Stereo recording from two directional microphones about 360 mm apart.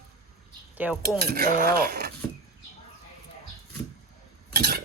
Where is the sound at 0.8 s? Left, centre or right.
Centre.